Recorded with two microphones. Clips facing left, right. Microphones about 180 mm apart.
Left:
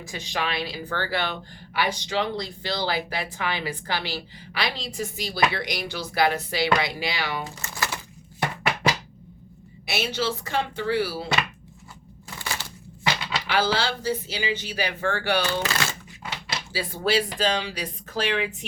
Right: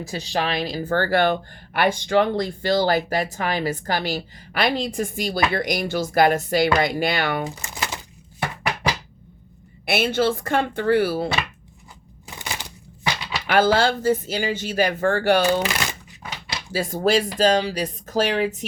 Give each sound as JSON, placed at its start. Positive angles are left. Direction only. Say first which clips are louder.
{"t": 0.0, "sound": "speech", "louder": "right 5 dB", "side_deg": -35}
{"t": 7.6, "sound": "a sound", "louder": "right 1 dB", "side_deg": -20}
{"t": 9.8, "sound": "speech", "louder": "right 7 dB", "side_deg": -55}
{"t": 12.3, "sound": "a sound", "louder": "right 1 dB", "side_deg": -15}
{"t": 13.5, "sound": "speech", "louder": "right 7 dB", "side_deg": -50}
{"t": 15.6, "sound": "speech", "louder": "right 2 dB", "side_deg": -15}
{"t": 16.7, "sound": "speech", "louder": "right 5 dB", "side_deg": -45}